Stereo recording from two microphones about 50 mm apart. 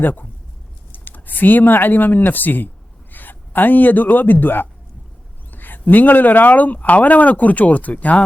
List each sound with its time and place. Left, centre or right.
0.0 s speech: left